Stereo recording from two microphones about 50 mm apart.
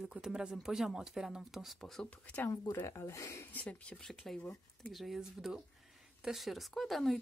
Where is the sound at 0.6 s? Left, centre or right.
Centre.